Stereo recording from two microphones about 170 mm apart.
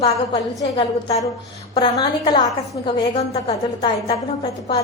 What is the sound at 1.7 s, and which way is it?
A woman's voice, 30° left (ahead or behind).